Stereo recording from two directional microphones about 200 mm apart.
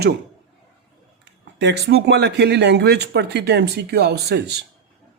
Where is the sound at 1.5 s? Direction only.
60° right (ahead or behind).